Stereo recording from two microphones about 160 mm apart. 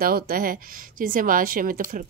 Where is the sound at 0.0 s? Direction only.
65° right (ahead or behind).